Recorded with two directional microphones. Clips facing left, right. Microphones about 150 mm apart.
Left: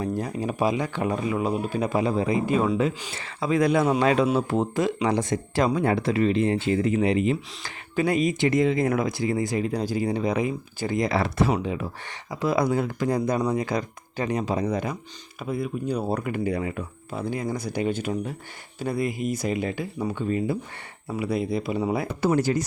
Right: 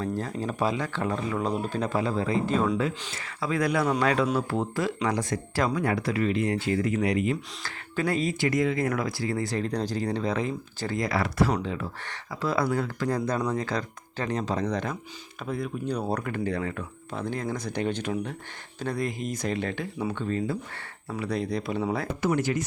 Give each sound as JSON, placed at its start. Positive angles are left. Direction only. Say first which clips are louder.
{"t": 0.0, "sound": "speech", "louder": "left 3 dB", "side_deg": 15}
{"t": 3.2, "sound": "speech", "louder": "left 5 dB", "side_deg": 25}
{"t": 20.1, "sound": "speech", "louder": "left 5 dB", "side_deg": 10}
{"t": 22.2, "sound": "speech", "louder": "left 4 dB", "side_deg": 35}